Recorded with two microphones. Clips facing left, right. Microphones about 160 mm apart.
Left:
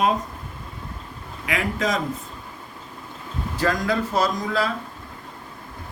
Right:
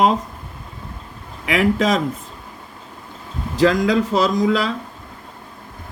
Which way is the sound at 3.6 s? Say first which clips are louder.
Right 7 dB; 90° right.